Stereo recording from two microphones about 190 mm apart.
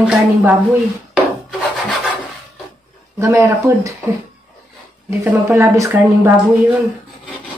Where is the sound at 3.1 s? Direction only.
15° right (ahead or behind).